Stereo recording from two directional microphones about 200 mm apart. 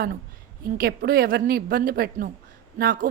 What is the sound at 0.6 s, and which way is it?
Speech, 50° right (ahead or behind).